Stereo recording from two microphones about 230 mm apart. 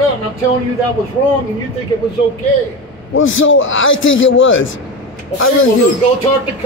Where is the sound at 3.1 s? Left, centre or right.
Left.